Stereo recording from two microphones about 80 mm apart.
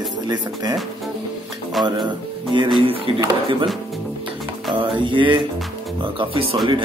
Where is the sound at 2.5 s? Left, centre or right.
Right.